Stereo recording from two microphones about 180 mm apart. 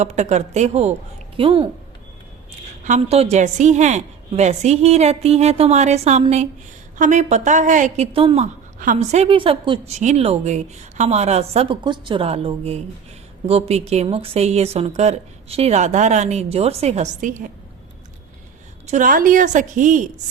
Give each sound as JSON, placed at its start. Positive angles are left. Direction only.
{"t": 0.0, "sound": "a woman's voice", "side_deg": -40}
{"t": 2.8, "sound": "a woman's voice", "side_deg": -40}
{"t": 8.8, "sound": "a woman's voice", "side_deg": -45}
{"t": 18.9, "sound": "a woman's voice", "side_deg": -45}